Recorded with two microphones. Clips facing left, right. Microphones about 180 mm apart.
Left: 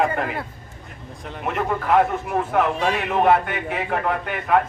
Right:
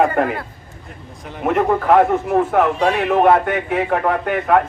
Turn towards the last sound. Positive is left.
turn(degrees=-50)  # may be behind; listen again after turning